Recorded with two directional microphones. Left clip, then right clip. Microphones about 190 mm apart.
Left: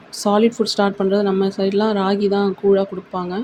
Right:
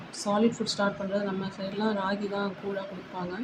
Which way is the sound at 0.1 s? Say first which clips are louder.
Left 10 dB; 45° left (ahead or behind).